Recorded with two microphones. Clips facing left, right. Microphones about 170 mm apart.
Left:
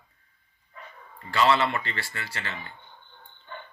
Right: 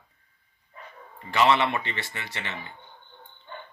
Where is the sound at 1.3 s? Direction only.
20° right (ahead or behind).